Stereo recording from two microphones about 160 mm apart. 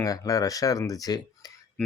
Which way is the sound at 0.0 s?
20° left (ahead or behind).